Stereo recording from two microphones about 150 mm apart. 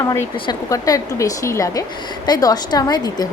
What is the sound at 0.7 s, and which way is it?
Speech, 20° left (ahead or behind).